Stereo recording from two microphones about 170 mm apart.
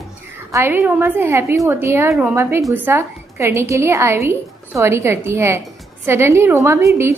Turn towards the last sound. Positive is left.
turn(degrees=-15)  # may be behind; listen again after turning